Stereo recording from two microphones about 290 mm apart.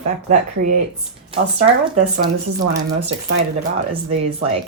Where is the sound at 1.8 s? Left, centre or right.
Right.